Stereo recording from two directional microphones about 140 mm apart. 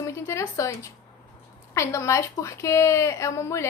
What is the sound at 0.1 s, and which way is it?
A woman's voice, 20° left (ahead or behind).